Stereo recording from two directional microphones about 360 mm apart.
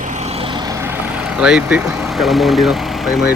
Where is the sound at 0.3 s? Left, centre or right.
Centre.